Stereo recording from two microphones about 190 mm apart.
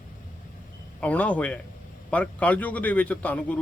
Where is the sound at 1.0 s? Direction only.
5° left (ahead or behind).